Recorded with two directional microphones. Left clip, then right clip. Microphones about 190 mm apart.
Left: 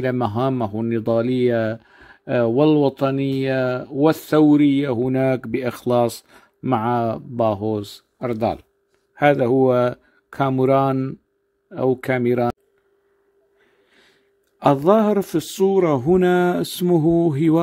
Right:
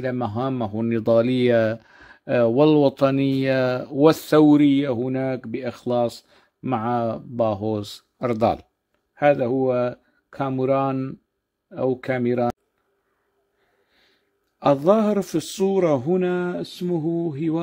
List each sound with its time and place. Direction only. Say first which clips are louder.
0.0 s speech: left 4 dB; 15° left (ahead or behind); by 8.6 s 10° right (ahead or behind)
9.1 s a man's voice: left 3 dB; 10° left (ahead or behind)
14.6 s a man's voice: left 2 dB; 15° left (ahead or behind)
16.1 s speech: left 6 dB; 25° left (ahead or behind)